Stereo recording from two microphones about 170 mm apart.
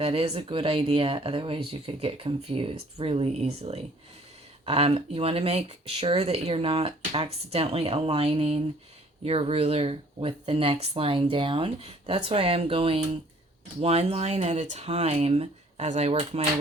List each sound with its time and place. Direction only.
0.0 s speech: 35° right (ahead or behind)